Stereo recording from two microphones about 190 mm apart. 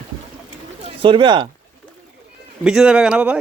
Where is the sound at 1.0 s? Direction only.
25° right (ahead or behind).